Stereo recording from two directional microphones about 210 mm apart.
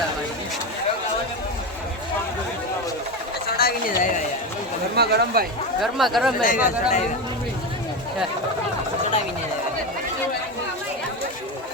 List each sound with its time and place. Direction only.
3.6 s a sound: 40° left (ahead or behind)
4.9 s speech: 50° right (ahead or behind)
5.8 s speech: centre (ahead or behind)
6.4 s speech: 40° left (ahead or behind)